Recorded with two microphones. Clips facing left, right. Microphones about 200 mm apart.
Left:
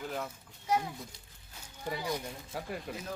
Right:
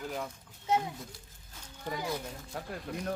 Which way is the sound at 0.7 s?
25° right (ahead or behind).